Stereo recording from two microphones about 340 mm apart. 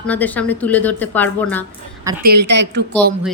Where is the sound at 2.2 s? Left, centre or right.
Right.